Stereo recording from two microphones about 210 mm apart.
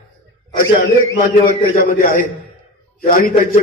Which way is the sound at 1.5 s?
40° left (ahead or behind).